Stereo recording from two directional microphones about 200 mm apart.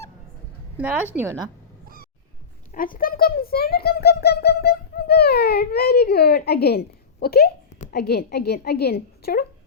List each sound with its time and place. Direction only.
0.8 s a woman's voice: 10° right (ahead or behind)
2.7 s speech: 45° left (ahead or behind)